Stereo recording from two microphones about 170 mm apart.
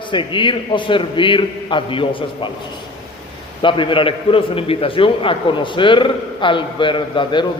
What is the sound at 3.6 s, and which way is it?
A man's voice, 30° left (ahead or behind).